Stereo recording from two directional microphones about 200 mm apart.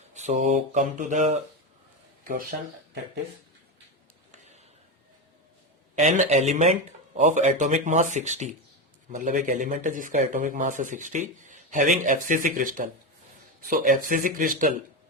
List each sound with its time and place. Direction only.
0.1 s speech: 35° right (ahead or behind)
6.0 s speech: 35° right (ahead or behind)